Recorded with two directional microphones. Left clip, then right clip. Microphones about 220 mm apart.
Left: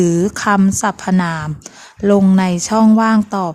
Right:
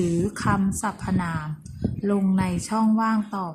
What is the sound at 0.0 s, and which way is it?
A woman's voice, 50° left (ahead or behind).